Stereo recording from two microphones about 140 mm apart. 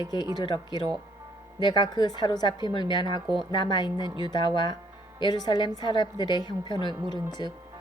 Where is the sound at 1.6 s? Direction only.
30° left (ahead or behind).